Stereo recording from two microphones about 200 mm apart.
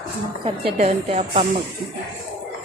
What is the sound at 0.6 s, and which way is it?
Speech, 30° right (ahead or behind).